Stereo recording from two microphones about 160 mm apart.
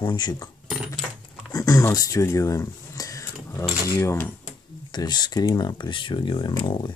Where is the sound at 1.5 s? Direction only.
20° left (ahead or behind).